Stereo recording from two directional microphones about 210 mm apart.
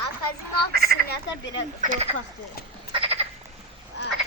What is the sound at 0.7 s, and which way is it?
Frog, 45° right (ahead or behind).